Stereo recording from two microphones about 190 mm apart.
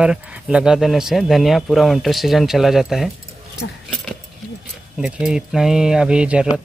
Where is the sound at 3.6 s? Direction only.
75° left (ahead or behind).